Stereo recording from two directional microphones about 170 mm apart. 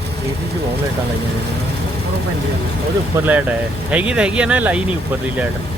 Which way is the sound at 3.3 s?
10° right (ahead or behind).